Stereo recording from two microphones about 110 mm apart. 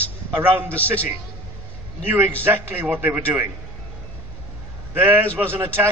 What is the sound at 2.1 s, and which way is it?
A man's voice, 20° right (ahead or behind).